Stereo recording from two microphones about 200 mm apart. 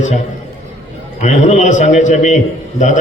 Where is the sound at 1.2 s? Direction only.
35° left (ahead or behind).